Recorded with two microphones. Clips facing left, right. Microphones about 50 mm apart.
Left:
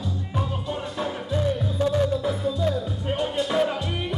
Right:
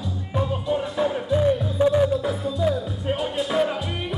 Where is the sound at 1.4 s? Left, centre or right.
Centre.